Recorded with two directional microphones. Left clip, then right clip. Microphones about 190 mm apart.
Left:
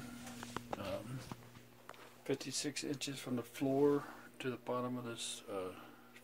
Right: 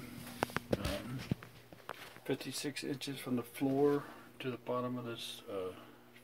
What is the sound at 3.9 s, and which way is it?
Speech, 10° left (ahead or behind).